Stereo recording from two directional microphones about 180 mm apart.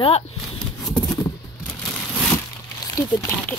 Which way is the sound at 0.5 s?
5° left (ahead or behind).